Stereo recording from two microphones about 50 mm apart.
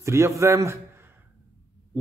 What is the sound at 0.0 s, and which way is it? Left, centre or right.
Speech, right.